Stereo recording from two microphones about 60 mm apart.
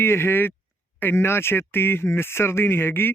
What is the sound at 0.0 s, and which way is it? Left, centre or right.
Speech, left.